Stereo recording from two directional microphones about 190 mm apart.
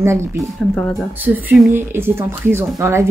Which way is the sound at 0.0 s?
15° right (ahead or behind).